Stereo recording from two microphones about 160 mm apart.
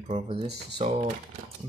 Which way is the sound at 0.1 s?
35° right (ahead or behind).